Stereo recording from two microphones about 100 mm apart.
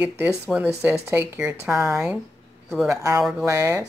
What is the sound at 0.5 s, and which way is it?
Speech, centre (ahead or behind).